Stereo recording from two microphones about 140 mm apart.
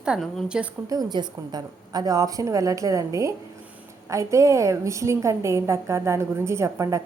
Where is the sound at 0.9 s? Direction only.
30° right (ahead or behind).